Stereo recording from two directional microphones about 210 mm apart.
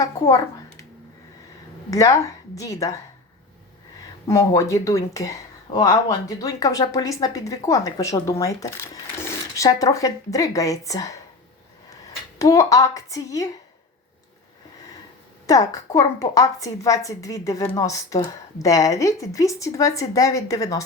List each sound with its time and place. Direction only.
0.0 s speech: 15° left (ahead or behind)
1.9 s speech: 15° left (ahead or behind)
4.3 s speech: 15° left (ahead or behind)
12.4 s speech: 15° left (ahead or behind)
15.4 s speech: 15° left (ahead or behind)